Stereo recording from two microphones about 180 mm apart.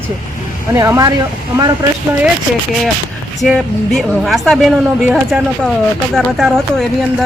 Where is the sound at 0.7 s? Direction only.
15° right (ahead or behind).